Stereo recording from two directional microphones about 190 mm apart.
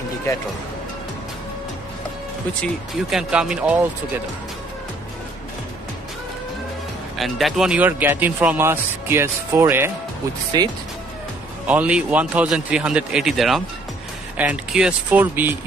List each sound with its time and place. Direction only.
2.6 s a man's voice: centre (ahead or behind)
7.2 s speech: centre (ahead or behind); by 10.7 s 20° right (ahead or behind)
11.6 s a man's voice: 5° right (ahead or behind)